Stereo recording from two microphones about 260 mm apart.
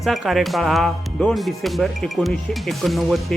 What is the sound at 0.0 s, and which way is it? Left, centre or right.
Speech, centre.